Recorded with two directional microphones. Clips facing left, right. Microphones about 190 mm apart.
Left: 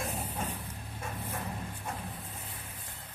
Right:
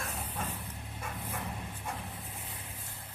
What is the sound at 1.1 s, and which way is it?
Dog, 5° left (ahead or behind).